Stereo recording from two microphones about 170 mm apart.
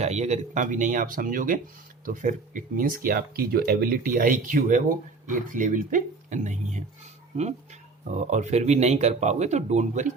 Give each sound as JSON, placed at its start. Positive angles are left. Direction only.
{"t": 0.0, "sound": "speech", "side_deg": -40}